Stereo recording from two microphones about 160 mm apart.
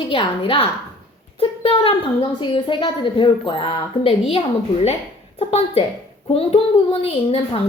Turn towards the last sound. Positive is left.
turn(degrees=35)  # may be behind; listen again after turning